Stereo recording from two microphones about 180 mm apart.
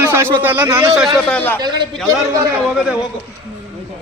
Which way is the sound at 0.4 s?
10° right (ahead or behind).